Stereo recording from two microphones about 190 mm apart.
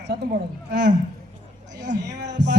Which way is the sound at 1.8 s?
65° right (ahead or behind).